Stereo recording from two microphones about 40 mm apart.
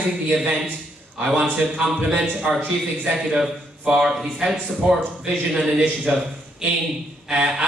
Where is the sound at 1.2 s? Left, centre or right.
Centre.